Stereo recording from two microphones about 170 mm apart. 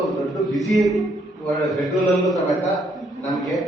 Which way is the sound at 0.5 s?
Centre (ahead or behind).